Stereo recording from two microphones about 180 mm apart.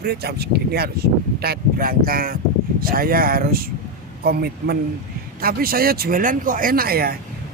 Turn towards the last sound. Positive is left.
turn(degrees=-55)  # may be behind; listen again after turning